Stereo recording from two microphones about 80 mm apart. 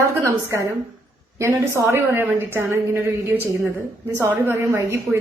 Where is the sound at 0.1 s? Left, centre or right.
Right.